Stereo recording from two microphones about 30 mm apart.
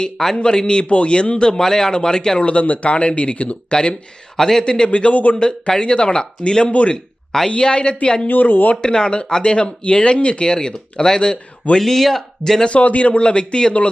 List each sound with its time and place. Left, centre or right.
0.2 s a man's voice: left
0.9 s speech: left
1.5 s a man's voice: centre
2.4 s speech: left
3.3 s speech: left
3.7 s speech: left
4.4 s a man's voice: centre
4.6 s speech: left
4.9 s speech: left
5.3 s speech: left
8.3 s speech: left
8.7 s speech: left
11.8 s speech: centre
12.6 s speech: left